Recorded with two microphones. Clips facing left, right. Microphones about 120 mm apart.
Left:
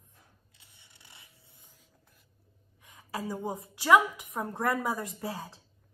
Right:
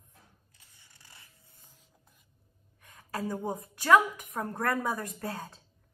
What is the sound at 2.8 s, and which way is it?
A woman's voice, 15° left (ahead or behind).